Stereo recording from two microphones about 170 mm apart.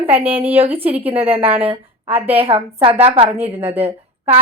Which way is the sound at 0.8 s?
35° right (ahead or behind).